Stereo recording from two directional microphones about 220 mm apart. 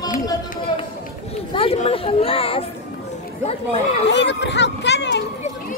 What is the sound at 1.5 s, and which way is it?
Speech, 25° left (ahead or behind).